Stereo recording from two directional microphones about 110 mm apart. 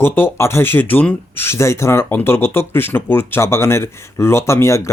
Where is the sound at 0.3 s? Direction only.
25° left (ahead or behind).